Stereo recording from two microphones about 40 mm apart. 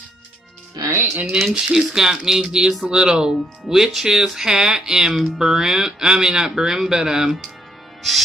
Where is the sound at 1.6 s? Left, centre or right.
Centre.